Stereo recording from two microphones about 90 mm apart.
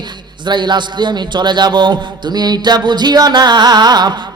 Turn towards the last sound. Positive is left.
turn(degrees=-55)  # may be behind; listen again after turning